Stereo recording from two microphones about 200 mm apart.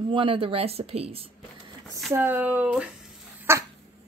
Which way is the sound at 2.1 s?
10° right (ahead or behind).